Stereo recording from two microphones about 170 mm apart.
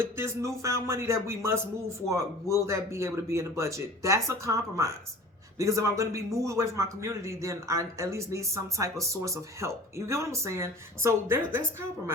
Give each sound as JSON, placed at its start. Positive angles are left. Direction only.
{"t": 0.0, "sound": "speech", "side_deg": -15}